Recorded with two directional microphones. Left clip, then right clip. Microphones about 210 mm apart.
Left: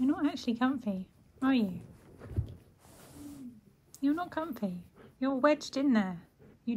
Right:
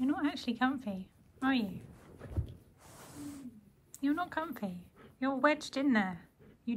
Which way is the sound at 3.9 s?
25° left (ahead or behind).